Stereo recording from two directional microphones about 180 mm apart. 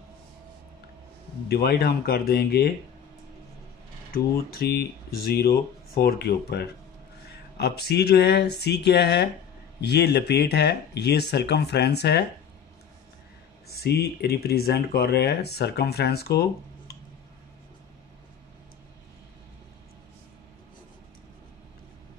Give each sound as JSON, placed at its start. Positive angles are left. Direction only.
{"t": 1.5, "sound": "speech", "side_deg": 60}
{"t": 4.1, "sound": "speech", "side_deg": 60}
{"t": 13.7, "sound": "speech", "side_deg": 60}